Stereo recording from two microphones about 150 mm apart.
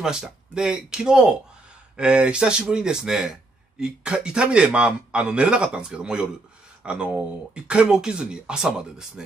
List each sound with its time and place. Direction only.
0.0 s a man's voice: 5° right (ahead or behind)